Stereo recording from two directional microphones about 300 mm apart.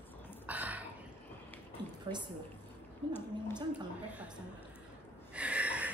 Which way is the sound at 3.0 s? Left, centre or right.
Centre.